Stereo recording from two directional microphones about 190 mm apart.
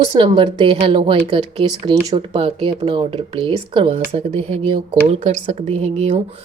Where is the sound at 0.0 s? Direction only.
25° right (ahead or behind).